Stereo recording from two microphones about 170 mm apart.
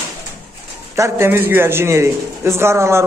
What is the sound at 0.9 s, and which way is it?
A man's voice, 15° right (ahead or behind).